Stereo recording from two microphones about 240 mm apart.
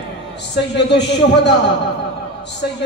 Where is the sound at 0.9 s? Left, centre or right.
Left.